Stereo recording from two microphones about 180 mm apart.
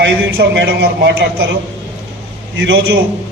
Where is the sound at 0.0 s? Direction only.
65° right (ahead or behind).